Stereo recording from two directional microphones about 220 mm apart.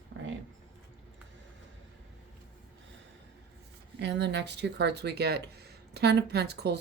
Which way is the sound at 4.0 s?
50° right (ahead or behind).